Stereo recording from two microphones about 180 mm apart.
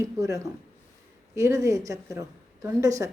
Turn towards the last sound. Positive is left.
turn(degrees=-15)  # may be behind; listen again after turning